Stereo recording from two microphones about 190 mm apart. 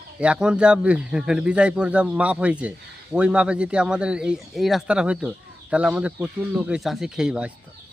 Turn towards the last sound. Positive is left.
turn(degrees=-5)  # may be behind; listen again after turning